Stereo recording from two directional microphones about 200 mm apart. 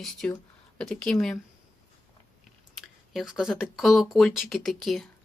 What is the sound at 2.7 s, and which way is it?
Speech, centre (ahead or behind).